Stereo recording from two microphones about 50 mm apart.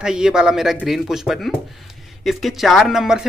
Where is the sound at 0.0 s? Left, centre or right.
Centre.